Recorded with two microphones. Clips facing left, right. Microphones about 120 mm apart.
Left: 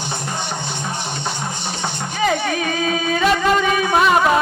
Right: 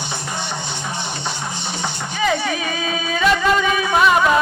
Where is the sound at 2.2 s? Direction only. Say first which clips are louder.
Left 1 dB; 45° left (ahead or behind).